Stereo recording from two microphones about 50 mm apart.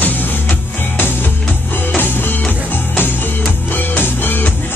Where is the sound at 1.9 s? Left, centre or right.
Left.